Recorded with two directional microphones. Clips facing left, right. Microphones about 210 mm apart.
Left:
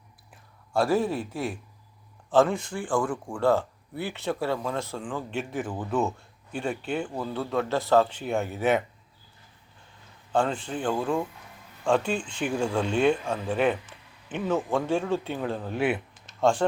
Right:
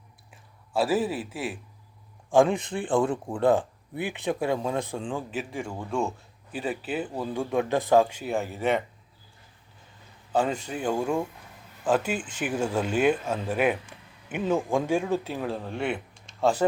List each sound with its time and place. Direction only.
0.7 s speech: 5° right (ahead or behind)
2.3 s speech: 15° right (ahead or behind)
5.3 s speech: centre (ahead or behind)
10.3 s speech: 10° right (ahead or behind)